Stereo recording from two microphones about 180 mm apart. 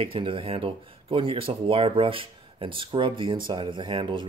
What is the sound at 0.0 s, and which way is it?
Speech, 30° right (ahead or behind).